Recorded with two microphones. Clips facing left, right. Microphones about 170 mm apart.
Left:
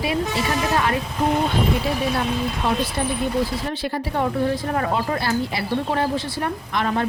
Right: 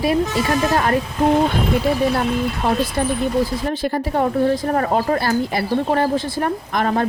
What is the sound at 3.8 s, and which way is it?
A woman's voice, 45° right (ahead or behind).